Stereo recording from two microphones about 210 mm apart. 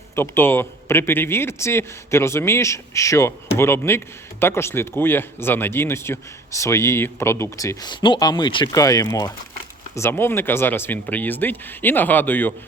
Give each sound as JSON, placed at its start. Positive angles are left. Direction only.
{"t": 0.2, "sound": "speech", "side_deg": 10}